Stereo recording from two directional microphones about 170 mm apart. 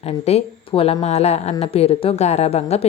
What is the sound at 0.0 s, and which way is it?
A woman's voice, 35° left (ahead or behind).